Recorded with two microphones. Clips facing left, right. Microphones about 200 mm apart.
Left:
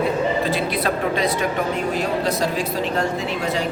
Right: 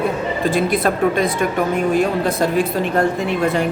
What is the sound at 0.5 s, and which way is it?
Speech, 50° right (ahead or behind).